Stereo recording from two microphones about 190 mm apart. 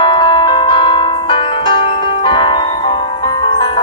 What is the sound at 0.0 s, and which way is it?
Music, 25° left (ahead or behind).